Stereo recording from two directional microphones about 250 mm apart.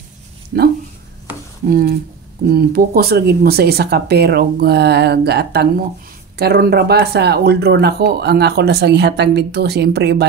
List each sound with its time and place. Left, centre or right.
0.5 s speech: right
1.3 s a sound: centre
1.7 s speech: right